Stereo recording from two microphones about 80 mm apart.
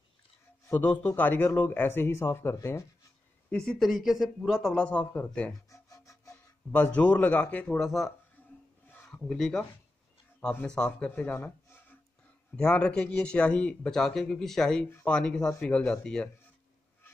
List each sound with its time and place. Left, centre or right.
0.7 s a man's voice: left
3.4 s speech: centre
3.8 s speech: centre
4.7 s speech: centre
5.7 s music: left
6.7 s speech: centre
8.8 s a sound: left
9.1 s speech: centre
10.7 s speech: centre
12.5 s speech: centre